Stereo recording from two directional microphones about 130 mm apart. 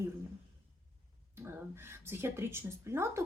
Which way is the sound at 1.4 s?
20° right (ahead or behind).